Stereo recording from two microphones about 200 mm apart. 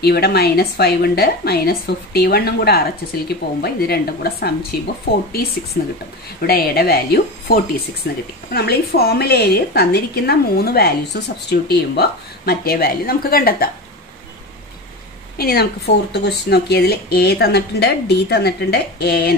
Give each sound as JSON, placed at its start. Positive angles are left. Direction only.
{"t": 0.0, "sound": "a woman's voice", "side_deg": 50}
{"t": 15.3, "sound": "a woman's voice", "side_deg": 50}